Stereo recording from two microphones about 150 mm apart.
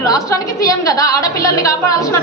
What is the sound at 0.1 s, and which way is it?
A woman's voice, 20° left (ahead or behind).